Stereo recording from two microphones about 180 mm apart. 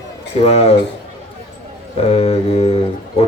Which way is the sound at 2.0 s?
35° left (ahead or behind).